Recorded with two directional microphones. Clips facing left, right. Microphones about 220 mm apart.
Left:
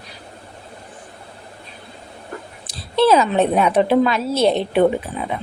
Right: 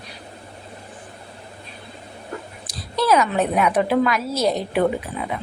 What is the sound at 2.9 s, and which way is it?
A woman's voice, 25° left (ahead or behind).